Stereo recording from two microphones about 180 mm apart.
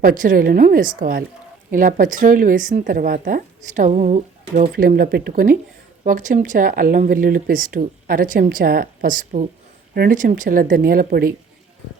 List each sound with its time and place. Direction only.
0.0 s speech: 50° right (ahead or behind)
4.7 s speech: 55° right (ahead or behind)